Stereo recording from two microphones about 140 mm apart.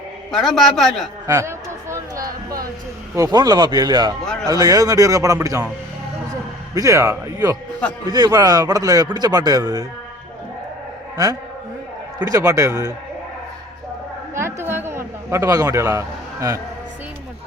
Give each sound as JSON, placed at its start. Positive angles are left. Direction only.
{"t": 0.3, "sound": "a man's voice", "side_deg": 0}
{"t": 1.3, "sound": "chatter", "side_deg": -20}
{"t": 3.2, "sound": "speech", "side_deg": -25}
{"t": 6.7, "sound": "speech", "side_deg": -25}
{"t": 12.2, "sound": "speech", "side_deg": -25}
{"t": 14.3, "sound": "a sound", "side_deg": -15}